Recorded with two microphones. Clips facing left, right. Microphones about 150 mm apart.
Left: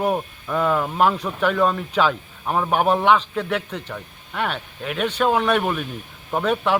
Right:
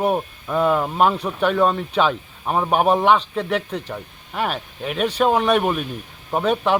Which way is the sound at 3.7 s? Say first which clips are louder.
Right 3 dB; 35° right (ahead or behind).